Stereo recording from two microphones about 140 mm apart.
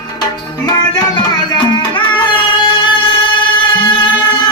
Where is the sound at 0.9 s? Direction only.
30° left (ahead or behind).